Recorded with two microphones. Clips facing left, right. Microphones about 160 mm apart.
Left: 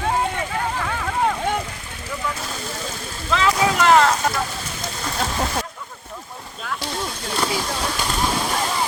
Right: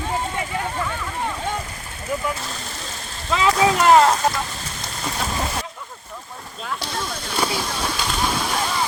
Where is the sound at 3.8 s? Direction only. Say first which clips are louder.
Right 1 dB; 35° right (ahead or behind).